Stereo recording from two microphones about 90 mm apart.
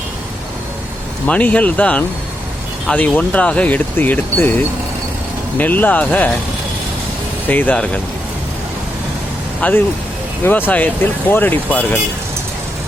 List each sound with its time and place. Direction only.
1.3 s speech: 15° left (ahead or behind)
5.5 s speech: 20° left (ahead or behind)
7.4 s speech: 20° left (ahead or behind)
9.6 s speech: 15° left (ahead or behind)